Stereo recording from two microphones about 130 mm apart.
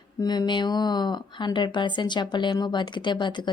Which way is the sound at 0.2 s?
35° left (ahead or behind).